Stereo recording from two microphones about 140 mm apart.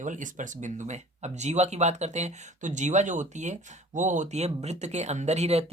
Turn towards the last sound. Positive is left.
turn(degrees=-50)  # may be behind; listen again after turning